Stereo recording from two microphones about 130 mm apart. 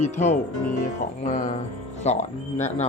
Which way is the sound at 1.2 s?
80° left.